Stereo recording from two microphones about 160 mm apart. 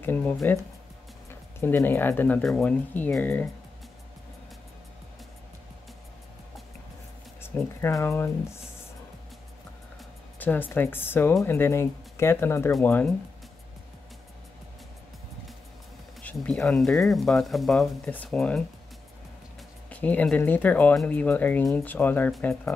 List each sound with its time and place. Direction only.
0.0 s speech: 10° left (ahead or behind)
1.6 s speech: 15° left (ahead or behind)
7.4 s speech: 15° left (ahead or behind)
10.4 s speech: 10° left (ahead or behind)
16.2 s speech: 10° left (ahead or behind)
19.9 s speech: 10° left (ahead or behind)